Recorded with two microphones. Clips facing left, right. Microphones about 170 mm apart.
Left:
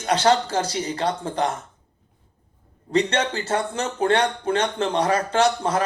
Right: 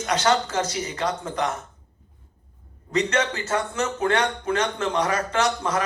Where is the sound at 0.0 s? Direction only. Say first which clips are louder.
Left 3 dB; 30° left (ahead or behind).